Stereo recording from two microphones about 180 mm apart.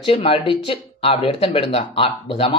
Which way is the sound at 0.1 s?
30° left (ahead or behind).